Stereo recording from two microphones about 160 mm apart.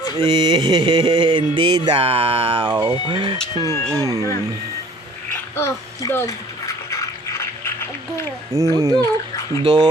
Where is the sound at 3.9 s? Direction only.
20° right (ahead or behind).